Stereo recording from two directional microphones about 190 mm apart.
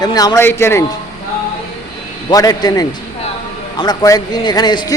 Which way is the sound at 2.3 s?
20° left (ahead or behind).